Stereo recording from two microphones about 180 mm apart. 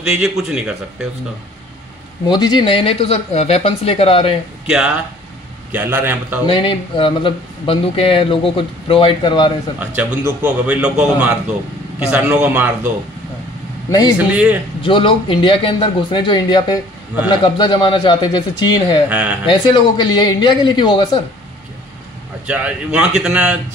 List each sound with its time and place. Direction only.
0.0 s a man's voice: centre (ahead or behind)
2.2 s speech: 25° left (ahead or behind)
4.6 s a man's voice: 5° right (ahead or behind)
6.4 s speech: 25° left (ahead or behind)
9.8 s a man's voice: 10° right (ahead or behind)
13.8 s a man's voice: 20° left (ahead or behind)
14.1 s a man's voice: 5° right (ahead or behind)
14.8 s speech: 30° left (ahead or behind)
19.0 s a man's voice: 10° right (ahead or behind)
19.4 s speech: 25° left (ahead or behind)
22.5 s a man's voice: 5° right (ahead or behind)